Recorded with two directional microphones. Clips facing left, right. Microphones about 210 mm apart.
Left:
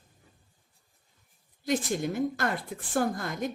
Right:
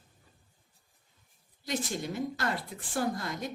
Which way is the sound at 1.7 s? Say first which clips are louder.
Left 5 dB; 50° left (ahead or behind).